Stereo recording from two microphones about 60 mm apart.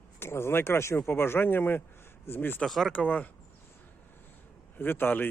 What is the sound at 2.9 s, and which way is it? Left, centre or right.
Speech, left.